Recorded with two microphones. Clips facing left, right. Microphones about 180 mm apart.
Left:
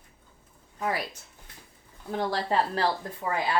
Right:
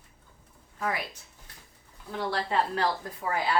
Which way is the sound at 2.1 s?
40° left (ahead or behind).